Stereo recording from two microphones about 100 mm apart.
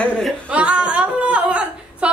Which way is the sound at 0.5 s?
10° right (ahead or behind).